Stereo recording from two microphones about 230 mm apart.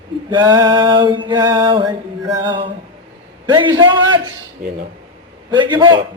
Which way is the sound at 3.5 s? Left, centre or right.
Centre.